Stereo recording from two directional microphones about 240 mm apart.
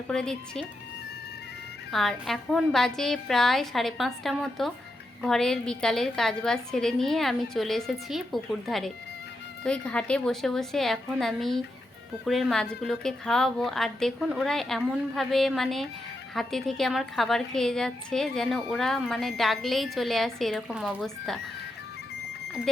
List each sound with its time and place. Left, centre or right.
0.1 s a woman's voice: centre
1.9 s a woman's voice: centre